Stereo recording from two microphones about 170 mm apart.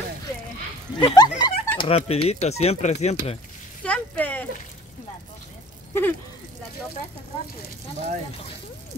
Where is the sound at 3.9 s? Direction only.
10° left (ahead or behind).